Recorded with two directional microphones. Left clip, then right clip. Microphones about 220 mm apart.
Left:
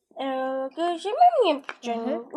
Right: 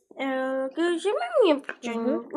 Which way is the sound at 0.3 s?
10° left (ahead or behind).